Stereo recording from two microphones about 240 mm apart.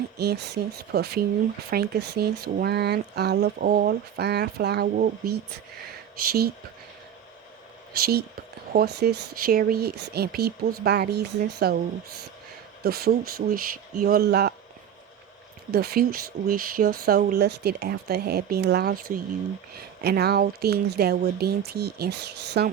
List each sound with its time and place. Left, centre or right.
0.2 s speech: right
8.7 s speech: right
12.8 s speech: right
15.7 s speech: right